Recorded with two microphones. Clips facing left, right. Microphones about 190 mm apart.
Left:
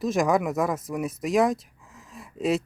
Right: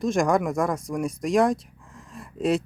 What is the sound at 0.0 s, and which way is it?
Speech, centre (ahead or behind).